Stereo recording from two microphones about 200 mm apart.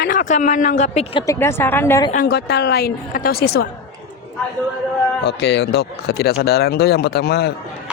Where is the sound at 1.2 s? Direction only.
15° left (ahead or behind).